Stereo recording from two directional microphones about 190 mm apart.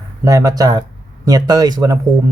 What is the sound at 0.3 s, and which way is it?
Speech, 15° right (ahead or behind).